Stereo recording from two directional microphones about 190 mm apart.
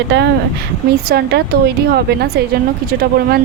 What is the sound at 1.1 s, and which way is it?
Speech, 55° right (ahead or behind).